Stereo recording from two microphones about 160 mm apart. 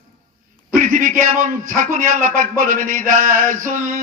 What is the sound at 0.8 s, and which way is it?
A man's voice, 55° right (ahead or behind).